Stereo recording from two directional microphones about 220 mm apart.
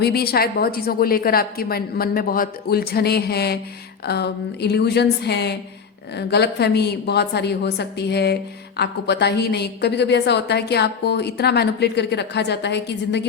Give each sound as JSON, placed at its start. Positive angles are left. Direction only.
{"t": 0.0, "sound": "a woman's voice", "side_deg": 45}